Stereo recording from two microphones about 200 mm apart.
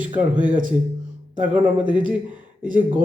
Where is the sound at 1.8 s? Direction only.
5° right (ahead or behind).